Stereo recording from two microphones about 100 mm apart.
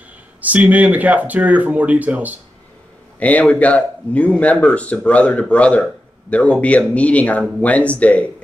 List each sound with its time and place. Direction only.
0.4 s speech: 15° right (ahead or behind)
3.2 s speech: 15° left (ahead or behind)